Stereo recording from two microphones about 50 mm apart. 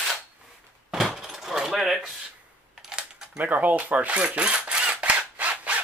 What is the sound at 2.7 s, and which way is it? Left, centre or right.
Typing, centre.